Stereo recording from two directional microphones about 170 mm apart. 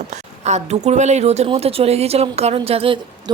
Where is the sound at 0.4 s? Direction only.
40° right (ahead or behind).